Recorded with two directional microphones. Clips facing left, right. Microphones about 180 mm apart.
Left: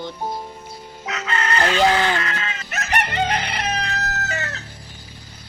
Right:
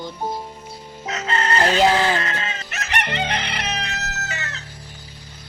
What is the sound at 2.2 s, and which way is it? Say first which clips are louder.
Chicken: even; 30° right (ahead or behind).